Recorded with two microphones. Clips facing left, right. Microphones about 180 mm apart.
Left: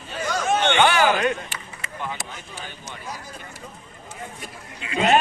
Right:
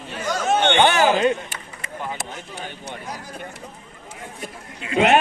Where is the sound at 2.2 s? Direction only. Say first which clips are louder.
Right 4 dB; 60° right (ahead or behind).